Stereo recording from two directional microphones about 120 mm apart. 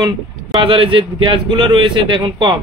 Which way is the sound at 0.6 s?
45° right (ahead or behind).